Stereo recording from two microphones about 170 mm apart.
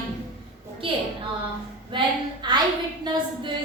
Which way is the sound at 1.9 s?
25° right (ahead or behind).